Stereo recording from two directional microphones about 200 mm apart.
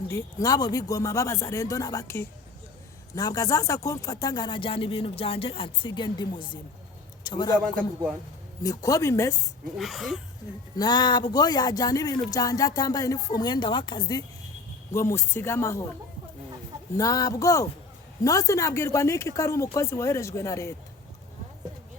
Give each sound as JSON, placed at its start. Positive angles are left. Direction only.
{"t": 0.1, "sound": "speech", "side_deg": 15}
{"t": 8.6, "sound": "speech", "side_deg": 15}
{"t": 9.7, "sound": "speech", "side_deg": 0}
{"t": 10.8, "sound": "speech", "side_deg": 20}
{"t": 17.0, "sound": "speech", "side_deg": 15}